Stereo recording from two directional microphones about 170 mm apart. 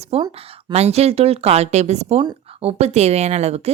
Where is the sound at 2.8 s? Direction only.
40° right (ahead or behind).